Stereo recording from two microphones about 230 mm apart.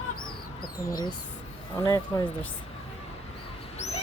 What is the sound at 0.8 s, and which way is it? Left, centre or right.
Speech, centre.